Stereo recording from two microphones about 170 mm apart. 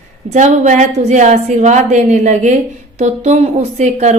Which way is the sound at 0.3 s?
45° right (ahead or behind).